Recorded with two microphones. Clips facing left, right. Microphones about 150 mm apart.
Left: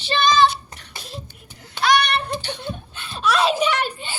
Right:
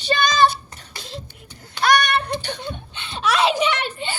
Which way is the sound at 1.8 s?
50° right (ahead or behind).